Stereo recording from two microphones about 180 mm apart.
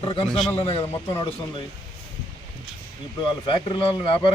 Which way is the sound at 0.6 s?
35° left (ahead or behind).